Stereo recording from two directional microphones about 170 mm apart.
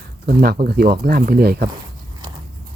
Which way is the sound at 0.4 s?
60° right (ahead or behind).